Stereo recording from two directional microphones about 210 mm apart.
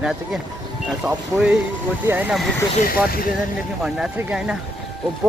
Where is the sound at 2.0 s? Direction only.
5° right (ahead or behind).